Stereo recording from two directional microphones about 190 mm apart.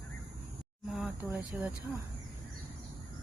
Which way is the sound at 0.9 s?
Centre (ahead or behind).